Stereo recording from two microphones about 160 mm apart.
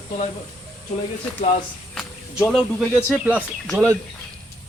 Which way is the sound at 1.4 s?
45° left (ahead or behind).